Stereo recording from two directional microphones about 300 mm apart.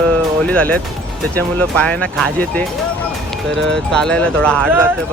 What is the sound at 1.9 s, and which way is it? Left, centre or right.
Speech, centre.